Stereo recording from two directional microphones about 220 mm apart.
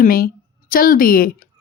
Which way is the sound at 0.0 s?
40° left (ahead or behind).